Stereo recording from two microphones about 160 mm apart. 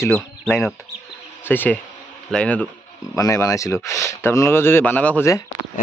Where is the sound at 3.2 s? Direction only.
20° left (ahead or behind).